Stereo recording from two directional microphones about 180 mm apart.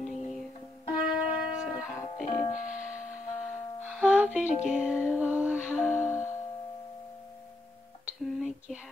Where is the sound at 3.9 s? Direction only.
5° right (ahead or behind).